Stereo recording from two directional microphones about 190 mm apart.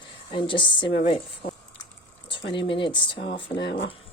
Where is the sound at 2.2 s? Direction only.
25° left (ahead or behind).